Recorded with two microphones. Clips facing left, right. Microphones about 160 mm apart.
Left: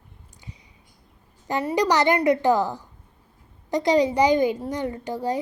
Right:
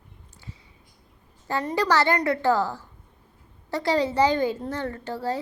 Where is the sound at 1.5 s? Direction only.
15° left (ahead or behind).